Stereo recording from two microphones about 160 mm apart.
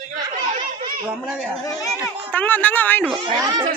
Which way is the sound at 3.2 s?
30° right (ahead or behind).